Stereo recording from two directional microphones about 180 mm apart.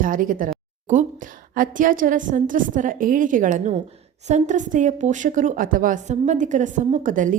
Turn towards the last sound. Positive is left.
turn(degrees=-45)  # may be behind; listen again after turning